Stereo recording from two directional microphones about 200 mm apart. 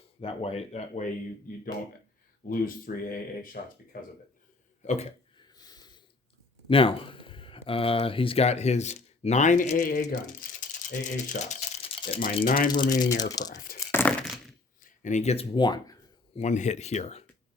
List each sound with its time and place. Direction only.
0.2 s speech: 30° left (ahead or behind)
2.5 s speech: 45° left (ahead or behind)
4.8 s speech: 35° left (ahead or behind)
5.4 s a sound: 20° left (ahead or behind)
6.7 s speech: 25° left (ahead or behind); by 10.2 s 45° left (ahead or behind)
10.6 s rattle: 40° left (ahead or behind)
12.5 s speech: 45° left (ahead or behind)
12.7 s speech: 20° left (ahead or behind)
13.7 s crumpling: 10° left (ahead or behind)
14.8 s a sound: 40° left (ahead or behind); by 16.4 s 20° left (ahead or behind)
16.4 s speech: 35° left (ahead or behind)